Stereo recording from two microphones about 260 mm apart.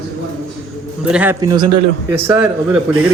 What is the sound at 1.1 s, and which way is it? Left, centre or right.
A man's voice, centre.